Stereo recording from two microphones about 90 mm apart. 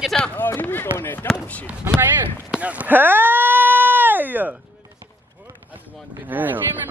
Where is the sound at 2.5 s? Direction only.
15° right (ahead or behind).